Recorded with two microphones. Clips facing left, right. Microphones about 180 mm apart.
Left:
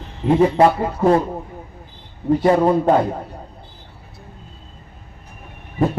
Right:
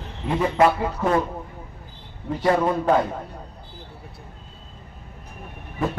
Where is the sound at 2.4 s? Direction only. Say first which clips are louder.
Left 4 dB; 30° left (ahead or behind).